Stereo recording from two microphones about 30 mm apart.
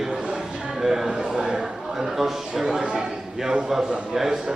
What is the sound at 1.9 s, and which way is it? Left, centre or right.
Speech, centre.